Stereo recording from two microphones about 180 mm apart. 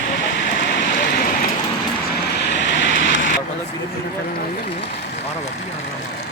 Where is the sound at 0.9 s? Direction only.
55° left (ahead or behind).